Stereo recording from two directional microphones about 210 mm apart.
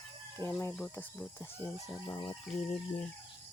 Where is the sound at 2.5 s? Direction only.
5° left (ahead or behind).